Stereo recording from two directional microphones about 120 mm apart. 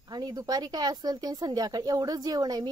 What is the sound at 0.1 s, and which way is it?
Speech, 35° right (ahead or behind).